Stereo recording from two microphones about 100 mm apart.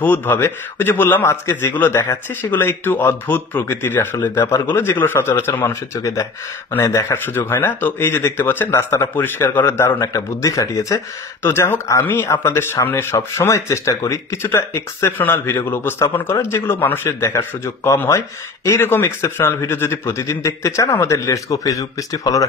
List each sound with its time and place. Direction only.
0.0 s speech: 20° left (ahead or behind)
5.9 s speech: 35° left (ahead or behind)